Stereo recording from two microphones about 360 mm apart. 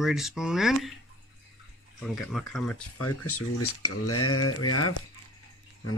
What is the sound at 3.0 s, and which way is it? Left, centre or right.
Speech, left.